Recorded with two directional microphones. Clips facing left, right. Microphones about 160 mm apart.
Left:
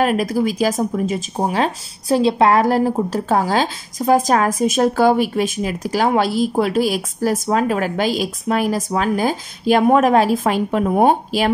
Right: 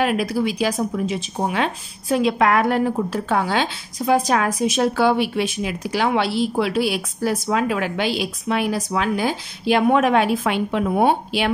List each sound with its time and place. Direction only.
0.0 s speech: 40° left (ahead or behind)